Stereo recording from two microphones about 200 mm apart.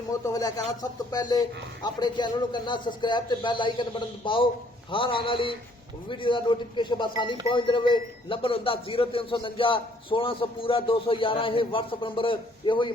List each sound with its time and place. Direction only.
0.3 s a man's voice: 20° left (ahead or behind)